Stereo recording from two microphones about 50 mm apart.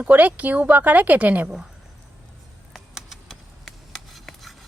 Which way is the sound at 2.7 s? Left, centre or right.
Centre.